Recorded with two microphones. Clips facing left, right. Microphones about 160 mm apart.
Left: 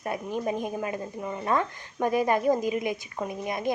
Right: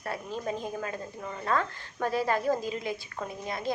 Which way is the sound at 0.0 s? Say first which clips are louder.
Left 4 dB; 15° left (ahead or behind).